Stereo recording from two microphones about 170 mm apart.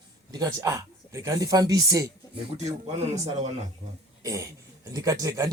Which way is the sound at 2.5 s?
40° right (ahead or behind).